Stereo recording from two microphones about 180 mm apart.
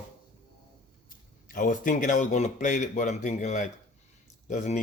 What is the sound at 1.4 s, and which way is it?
Speech, 50° left (ahead or behind).